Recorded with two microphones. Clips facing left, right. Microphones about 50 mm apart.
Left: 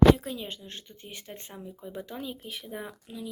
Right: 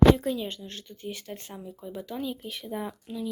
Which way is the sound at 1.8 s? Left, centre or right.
Left.